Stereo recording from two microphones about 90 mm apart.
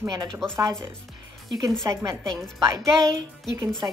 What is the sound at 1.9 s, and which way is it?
A woman's voice, 35° right (ahead or behind).